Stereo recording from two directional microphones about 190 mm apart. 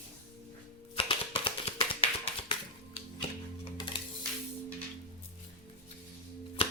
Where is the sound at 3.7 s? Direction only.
25° left (ahead or behind).